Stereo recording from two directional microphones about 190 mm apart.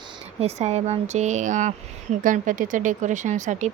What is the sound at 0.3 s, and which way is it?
Speech, 35° right (ahead or behind).